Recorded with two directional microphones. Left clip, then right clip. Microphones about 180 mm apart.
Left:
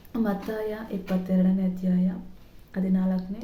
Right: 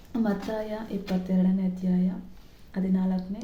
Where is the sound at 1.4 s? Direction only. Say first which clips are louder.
Left 2 dB; 10° left (ahead or behind).